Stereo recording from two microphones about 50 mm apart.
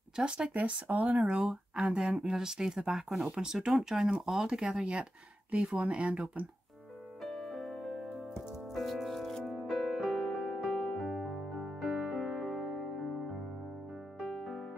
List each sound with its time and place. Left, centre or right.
0.1 s speech: centre
7.2 s music: centre
11.8 s music: centre